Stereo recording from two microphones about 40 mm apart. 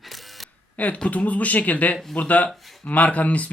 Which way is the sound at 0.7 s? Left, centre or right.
Left.